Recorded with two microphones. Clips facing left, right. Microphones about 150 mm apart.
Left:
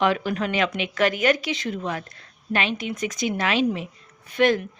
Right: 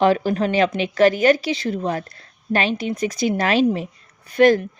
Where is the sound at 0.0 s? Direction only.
35° right (ahead or behind).